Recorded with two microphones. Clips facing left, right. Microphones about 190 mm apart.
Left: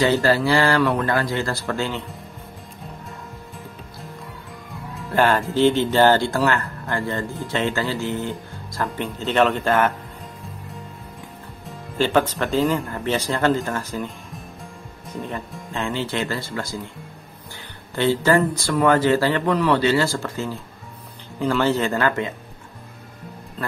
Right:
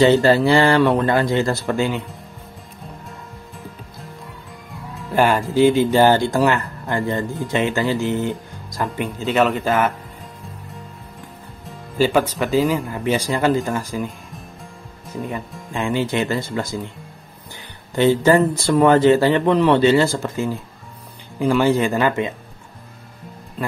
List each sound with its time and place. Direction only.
0.0 s speech: 20° right (ahead or behind)
3.1 s music: centre (ahead or behind)
5.1 s speech: 10° right (ahead or behind)
11.6 s speech: 5° right (ahead or behind)
14.0 s music: centre (ahead or behind)
15.1 s speech: 5° right (ahead or behind)
17.9 s speech: 15° right (ahead or behind)